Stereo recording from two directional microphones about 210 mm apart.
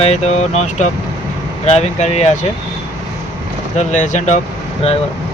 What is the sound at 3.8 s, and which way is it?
Speech, 35° left (ahead or behind).